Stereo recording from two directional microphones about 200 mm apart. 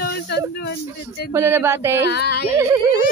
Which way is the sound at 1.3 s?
15° right (ahead or behind).